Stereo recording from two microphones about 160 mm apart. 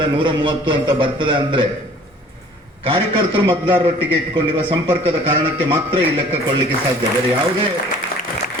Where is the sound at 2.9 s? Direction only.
35° right (ahead or behind).